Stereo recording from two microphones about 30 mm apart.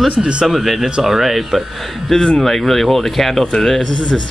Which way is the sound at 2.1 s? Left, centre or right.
Left.